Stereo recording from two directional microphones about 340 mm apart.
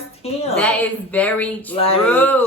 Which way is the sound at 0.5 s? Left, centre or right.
Centre.